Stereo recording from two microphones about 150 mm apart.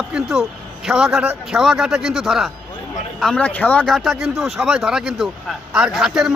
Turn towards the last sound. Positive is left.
turn(degrees=0)  # may be behind; listen again after turning